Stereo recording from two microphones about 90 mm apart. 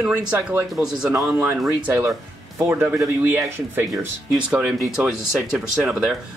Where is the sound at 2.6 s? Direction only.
25° right (ahead or behind).